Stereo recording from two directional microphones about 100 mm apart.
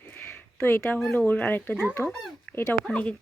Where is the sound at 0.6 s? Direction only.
20° left (ahead or behind).